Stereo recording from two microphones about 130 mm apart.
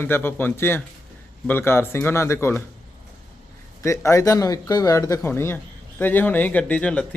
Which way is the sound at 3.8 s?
25° left (ahead or behind).